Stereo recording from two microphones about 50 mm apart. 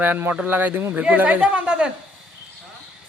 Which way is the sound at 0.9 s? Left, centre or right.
Right.